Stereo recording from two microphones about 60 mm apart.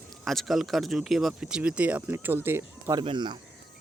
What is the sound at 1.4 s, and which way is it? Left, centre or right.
Speech, centre.